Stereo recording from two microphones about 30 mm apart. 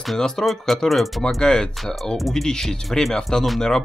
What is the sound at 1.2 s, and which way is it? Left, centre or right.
Speech, left.